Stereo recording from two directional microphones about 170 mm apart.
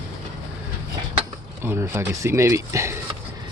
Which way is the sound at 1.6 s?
15° right (ahead or behind).